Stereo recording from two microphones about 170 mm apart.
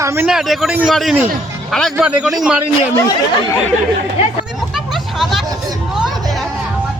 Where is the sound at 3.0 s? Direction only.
20° left (ahead or behind).